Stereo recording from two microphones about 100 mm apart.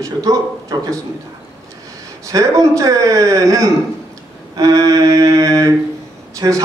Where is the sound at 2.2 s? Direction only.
35° right (ahead or behind).